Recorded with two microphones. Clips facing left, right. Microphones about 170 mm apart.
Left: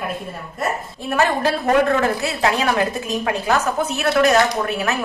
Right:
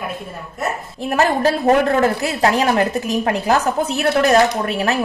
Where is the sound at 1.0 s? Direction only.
40° right (ahead or behind).